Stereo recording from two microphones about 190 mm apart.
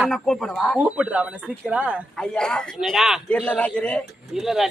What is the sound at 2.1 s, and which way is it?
A man's voice, 5° left (ahead or behind).